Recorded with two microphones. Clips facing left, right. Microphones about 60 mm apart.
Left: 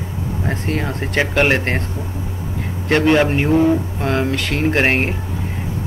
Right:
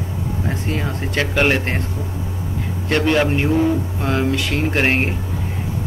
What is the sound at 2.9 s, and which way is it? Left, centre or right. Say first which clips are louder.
Speech: left 3 dB; centre.